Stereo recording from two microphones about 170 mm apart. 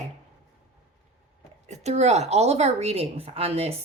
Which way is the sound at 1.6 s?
40° right (ahead or behind).